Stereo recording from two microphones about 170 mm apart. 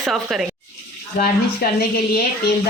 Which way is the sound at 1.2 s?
70° left (ahead or behind).